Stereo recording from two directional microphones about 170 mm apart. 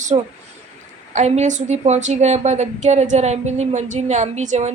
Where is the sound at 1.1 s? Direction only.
45° right (ahead or behind).